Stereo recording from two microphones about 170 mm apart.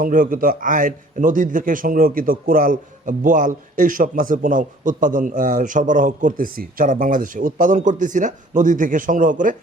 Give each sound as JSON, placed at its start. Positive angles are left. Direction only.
{"t": 0.0, "sound": "a man's voice", "side_deg": -55}